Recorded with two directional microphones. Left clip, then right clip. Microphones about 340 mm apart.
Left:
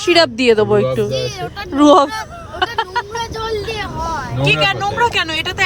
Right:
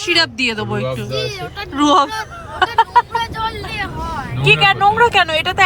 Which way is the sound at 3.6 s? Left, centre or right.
Centre.